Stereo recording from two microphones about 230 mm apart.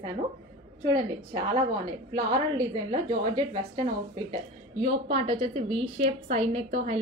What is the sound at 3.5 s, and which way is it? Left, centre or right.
A woman's voice, right.